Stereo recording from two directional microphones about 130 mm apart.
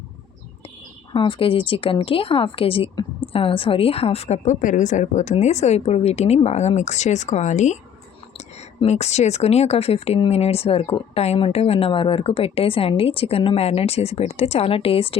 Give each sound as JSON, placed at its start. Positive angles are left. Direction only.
{"t": 1.1, "sound": "a woman's voice", "side_deg": 40}
{"t": 2.9, "sound": "a sound", "side_deg": 35}
{"t": 3.3, "sound": "a woman's voice", "side_deg": 45}
{"t": 8.8, "sound": "a woman's voice", "side_deg": 60}